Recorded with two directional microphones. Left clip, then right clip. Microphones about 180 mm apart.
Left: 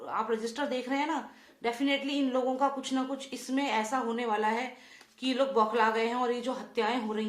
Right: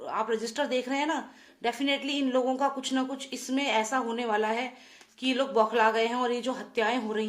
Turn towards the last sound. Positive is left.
turn(degrees=-40)  # may be behind; listen again after turning